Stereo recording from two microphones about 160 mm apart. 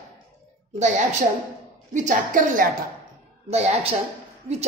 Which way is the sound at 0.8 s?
45° right (ahead or behind).